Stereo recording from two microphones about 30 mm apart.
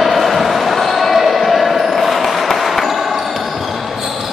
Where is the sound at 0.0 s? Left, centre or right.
Centre.